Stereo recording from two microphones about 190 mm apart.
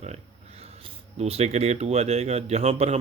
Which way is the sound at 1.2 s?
35° right (ahead or behind).